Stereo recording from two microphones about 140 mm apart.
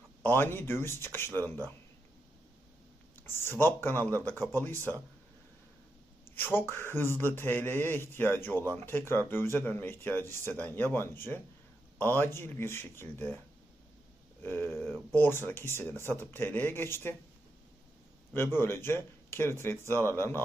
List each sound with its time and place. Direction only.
0.2 s speech: 15° left (ahead or behind)
3.2 s speech: 15° left (ahead or behind)
6.3 s speech: 15° left (ahead or behind)
14.4 s speech: 15° left (ahead or behind)
18.3 s speech: 15° left (ahead or behind)